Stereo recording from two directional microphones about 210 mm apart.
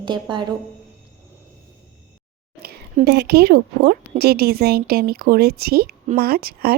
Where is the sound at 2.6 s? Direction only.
45° right (ahead or behind).